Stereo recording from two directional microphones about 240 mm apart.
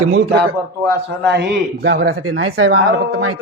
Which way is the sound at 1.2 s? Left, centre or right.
Right.